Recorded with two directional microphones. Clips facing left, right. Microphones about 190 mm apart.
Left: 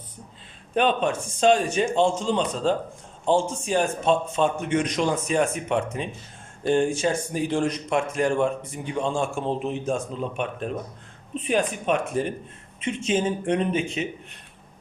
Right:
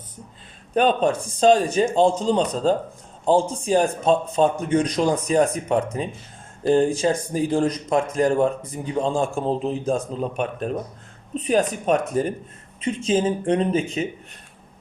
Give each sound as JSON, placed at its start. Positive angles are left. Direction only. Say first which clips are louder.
{"t": 0.7, "sound": "a man's voice", "louder": "right 3 dB", "side_deg": -40}